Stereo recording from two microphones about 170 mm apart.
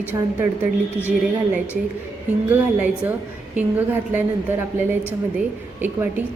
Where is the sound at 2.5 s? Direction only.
10° right (ahead or behind).